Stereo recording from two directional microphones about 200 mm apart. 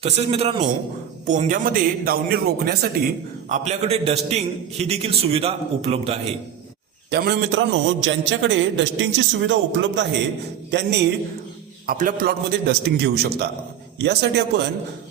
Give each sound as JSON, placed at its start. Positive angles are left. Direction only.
{"t": 0.0, "sound": "a man's voice", "side_deg": -30}
{"t": 3.5, "sound": "a man's voice", "side_deg": -35}
{"t": 7.1, "sound": "a man's voice", "side_deg": -55}
{"t": 11.9, "sound": "a man's voice", "side_deg": -45}